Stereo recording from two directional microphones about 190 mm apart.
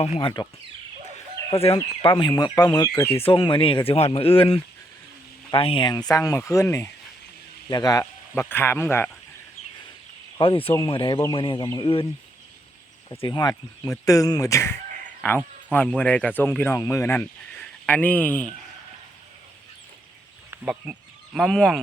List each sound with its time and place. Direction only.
0.0 s speech: 30° left (ahead or behind)
1.5 s speech: 30° left (ahead or behind); by 9.0 s 10° left (ahead or behind)
10.3 s speech: 25° left (ahead or behind)
13.1 s speech: 20° left (ahead or behind)
20.5 s speech: 5° right (ahead or behind)